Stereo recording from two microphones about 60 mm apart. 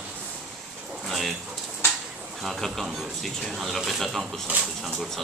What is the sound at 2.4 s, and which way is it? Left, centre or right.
Speech, centre.